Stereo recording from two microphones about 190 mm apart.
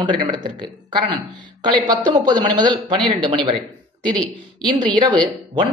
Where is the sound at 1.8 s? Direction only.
20° right (ahead or behind).